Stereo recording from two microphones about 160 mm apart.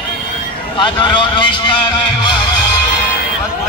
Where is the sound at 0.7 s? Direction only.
30° left (ahead or behind).